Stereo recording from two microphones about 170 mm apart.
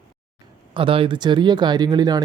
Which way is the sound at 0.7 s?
30° right (ahead or behind).